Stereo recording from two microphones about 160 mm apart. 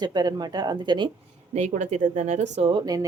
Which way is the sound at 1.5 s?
45° right (ahead or behind).